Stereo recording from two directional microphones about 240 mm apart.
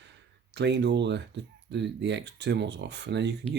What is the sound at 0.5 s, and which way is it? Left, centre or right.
Speech, right.